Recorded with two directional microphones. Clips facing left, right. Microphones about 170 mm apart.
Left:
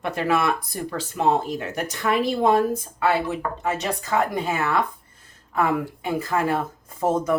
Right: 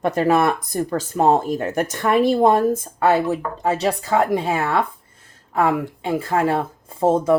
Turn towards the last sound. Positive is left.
turn(degrees=-30)  # may be behind; listen again after turning